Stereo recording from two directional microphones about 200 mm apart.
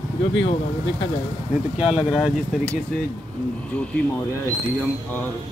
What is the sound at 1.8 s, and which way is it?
Speech, centre (ahead or behind).